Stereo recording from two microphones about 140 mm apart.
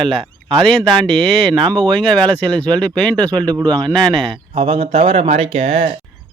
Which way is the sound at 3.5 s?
30° right (ahead or behind).